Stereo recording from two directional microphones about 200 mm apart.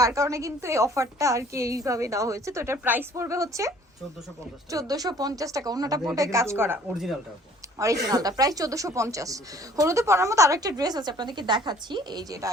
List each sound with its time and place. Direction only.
0.0 s speech: 15° right (ahead or behind)
4.7 s a woman's voice: 15° right (ahead or behind)
7.8 s speech: 15° right (ahead or behind)